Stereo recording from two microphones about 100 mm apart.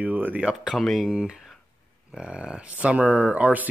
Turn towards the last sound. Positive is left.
turn(degrees=-15)  # may be behind; listen again after turning